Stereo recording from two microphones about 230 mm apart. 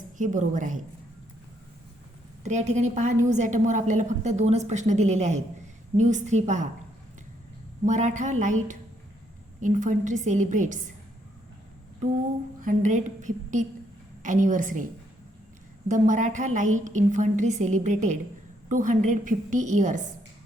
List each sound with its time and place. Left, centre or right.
0.2 s a woman's voice: right
2.4 s a woman's voice: right
7.9 s a woman's voice: right
12.0 s a woman's voice: right
15.9 s a woman's voice: right